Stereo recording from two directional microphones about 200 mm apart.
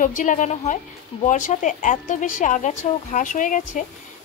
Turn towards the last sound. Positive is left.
turn(degrees=40)  # may be behind; listen again after turning